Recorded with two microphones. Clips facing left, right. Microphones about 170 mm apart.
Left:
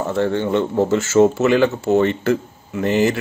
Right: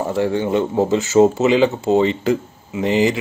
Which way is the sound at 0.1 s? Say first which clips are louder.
Even; 10° right (ahead or behind).